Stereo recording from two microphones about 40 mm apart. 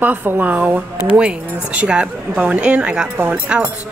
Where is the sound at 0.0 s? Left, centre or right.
Right.